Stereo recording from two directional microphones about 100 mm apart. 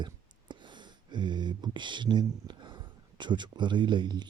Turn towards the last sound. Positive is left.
turn(degrees=-50)  # may be behind; listen again after turning